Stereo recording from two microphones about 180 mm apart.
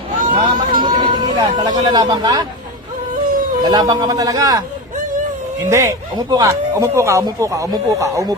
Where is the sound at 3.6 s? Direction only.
20° right (ahead or behind).